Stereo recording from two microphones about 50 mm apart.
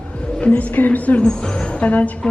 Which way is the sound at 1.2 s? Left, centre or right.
Centre.